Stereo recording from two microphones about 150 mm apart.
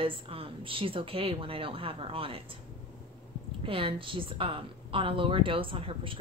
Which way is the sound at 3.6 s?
35° right (ahead or behind).